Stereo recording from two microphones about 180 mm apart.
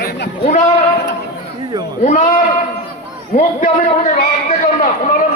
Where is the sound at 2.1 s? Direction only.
45° left (ahead or behind).